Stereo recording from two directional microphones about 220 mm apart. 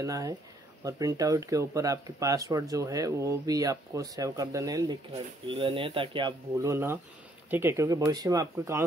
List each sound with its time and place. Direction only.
0.0 s speech: 15° right (ahead or behind)